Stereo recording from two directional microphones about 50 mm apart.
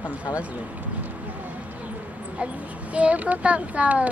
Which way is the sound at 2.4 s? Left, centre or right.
Right.